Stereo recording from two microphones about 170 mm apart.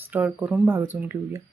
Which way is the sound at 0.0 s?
10° right (ahead or behind).